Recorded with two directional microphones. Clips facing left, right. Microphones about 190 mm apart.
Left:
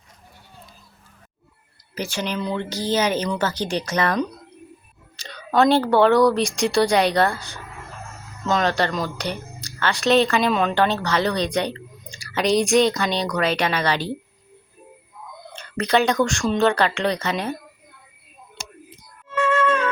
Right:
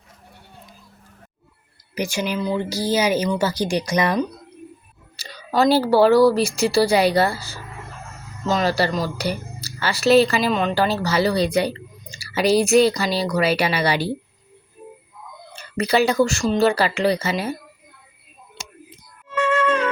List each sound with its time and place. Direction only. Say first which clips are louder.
2.0 s a woman's voice: right 3 dB; 10° right (ahead or behind)
15.5 s speech: right 1 dB; 5° right (ahead or behind)
19.5 s flute: right 1 dB; 35° right (ahead or behind)